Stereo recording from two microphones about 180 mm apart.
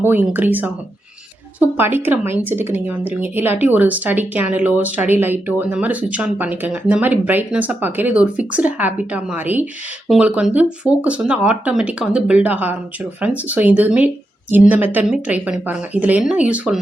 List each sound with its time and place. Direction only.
0.0 s speech: 10° right (ahead or behind)